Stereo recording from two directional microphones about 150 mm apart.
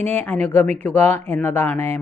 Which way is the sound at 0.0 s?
10° left (ahead or behind).